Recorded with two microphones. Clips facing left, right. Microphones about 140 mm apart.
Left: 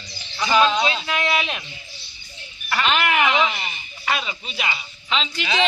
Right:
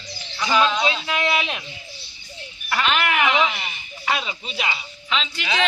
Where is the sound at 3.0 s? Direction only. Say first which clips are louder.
Left 1 dB; 5° right (ahead or behind).